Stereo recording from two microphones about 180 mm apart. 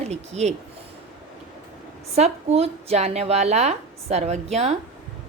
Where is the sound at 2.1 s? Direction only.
35° right (ahead or behind).